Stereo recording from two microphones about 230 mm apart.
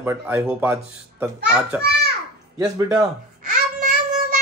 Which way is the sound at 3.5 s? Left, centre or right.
Right.